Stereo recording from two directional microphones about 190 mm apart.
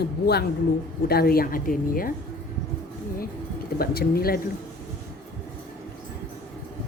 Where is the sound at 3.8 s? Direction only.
55° left (ahead or behind).